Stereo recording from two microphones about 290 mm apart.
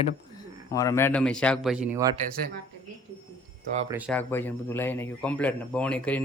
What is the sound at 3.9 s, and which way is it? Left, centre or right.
Speech, centre.